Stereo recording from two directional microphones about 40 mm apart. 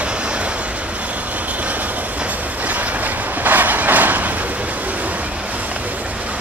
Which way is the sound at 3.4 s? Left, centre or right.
Right.